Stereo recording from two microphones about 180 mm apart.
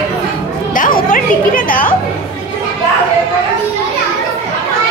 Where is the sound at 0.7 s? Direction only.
50° left (ahead or behind).